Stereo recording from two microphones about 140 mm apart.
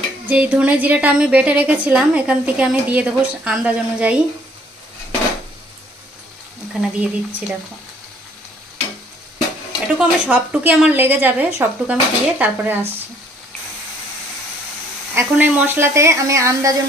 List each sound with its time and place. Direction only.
0.3 s a woman's voice: 10° right (ahead or behind)
6.7 s a woman's voice: 5° right (ahead or behind)
9.9 s a woman's voice: 10° right (ahead or behind)
15.1 s speech: 10° right (ahead or behind)